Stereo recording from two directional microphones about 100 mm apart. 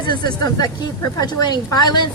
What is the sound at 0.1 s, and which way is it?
Speech, 45° left (ahead or behind).